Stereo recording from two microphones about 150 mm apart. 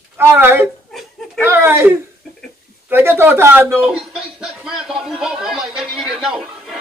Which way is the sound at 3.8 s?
Centre (ahead or behind).